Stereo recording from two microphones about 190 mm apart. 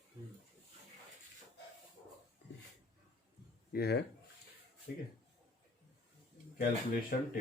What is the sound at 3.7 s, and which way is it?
Speech, 55° left (ahead or behind).